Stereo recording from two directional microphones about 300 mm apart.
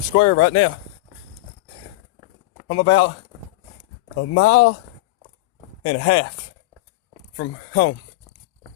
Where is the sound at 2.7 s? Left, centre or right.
Left.